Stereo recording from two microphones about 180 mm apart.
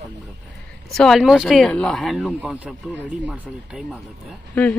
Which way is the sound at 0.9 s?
Centre (ahead or behind).